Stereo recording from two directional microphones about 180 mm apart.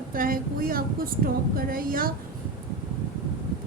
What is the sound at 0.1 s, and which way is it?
A woman's voice, 55° right (ahead or behind).